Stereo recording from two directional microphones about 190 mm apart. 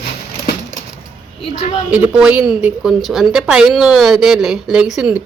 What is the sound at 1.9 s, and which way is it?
A woman's voice, 5° right (ahead or behind).